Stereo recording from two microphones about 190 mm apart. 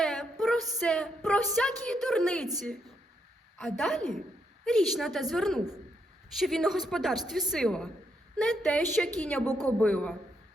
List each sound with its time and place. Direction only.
0.0 s a sound: centre (ahead or behind)
1.8 s a woman's voice: 5° left (ahead or behind)
3.6 s a woman's voice: 5° left (ahead or behind)
9.5 s a man's voice: 20° right (ahead or behind)
9.8 s a man's voice: 5° left (ahead or behind)